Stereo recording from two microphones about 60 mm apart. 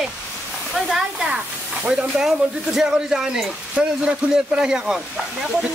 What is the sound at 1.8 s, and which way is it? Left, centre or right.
Speech, right.